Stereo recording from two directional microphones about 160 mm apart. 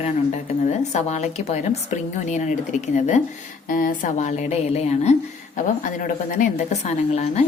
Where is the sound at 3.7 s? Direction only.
60° left (ahead or behind); by 5.1 s 40° left (ahead or behind).